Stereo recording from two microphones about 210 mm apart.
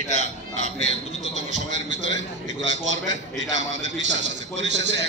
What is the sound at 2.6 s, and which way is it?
A man's voice, 60° right (ahead or behind).